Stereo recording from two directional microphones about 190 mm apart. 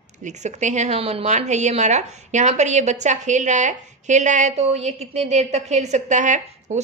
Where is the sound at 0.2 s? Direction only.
40° right (ahead or behind).